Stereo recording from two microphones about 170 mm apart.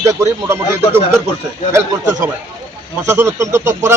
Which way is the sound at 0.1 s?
15° right (ahead or behind).